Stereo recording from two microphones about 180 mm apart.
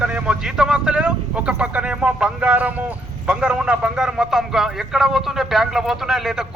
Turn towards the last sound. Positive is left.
turn(degrees=0)  # may be behind; listen again after turning